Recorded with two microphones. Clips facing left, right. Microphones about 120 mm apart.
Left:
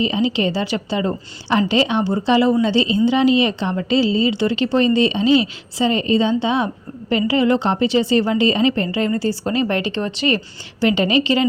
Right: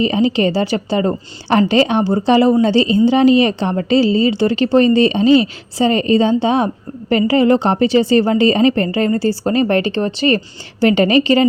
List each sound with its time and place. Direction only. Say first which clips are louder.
0.0 s a woman's voice: right 4 dB; 50° right (ahead or behind)